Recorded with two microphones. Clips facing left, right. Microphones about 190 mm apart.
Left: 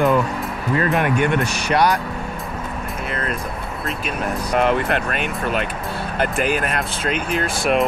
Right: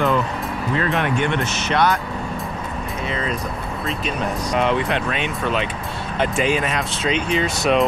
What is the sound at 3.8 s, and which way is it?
Speech, 5° left (ahead or behind).